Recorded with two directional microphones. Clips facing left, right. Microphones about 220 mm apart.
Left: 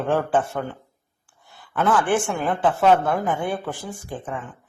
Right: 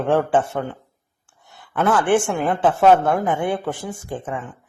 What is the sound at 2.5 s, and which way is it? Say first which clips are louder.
A woman's voice: right 3 dB; 20° right (ahead or behind).